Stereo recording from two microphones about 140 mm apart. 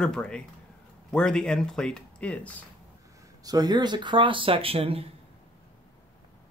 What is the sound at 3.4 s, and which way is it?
Speech, 25° right (ahead or behind).